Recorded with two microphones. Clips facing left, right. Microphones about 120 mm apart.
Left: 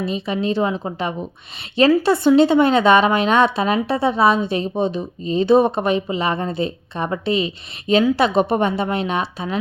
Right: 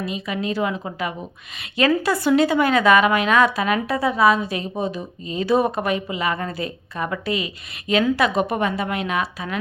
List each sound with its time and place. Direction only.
0.0 s a woman's voice: 30° left (ahead or behind)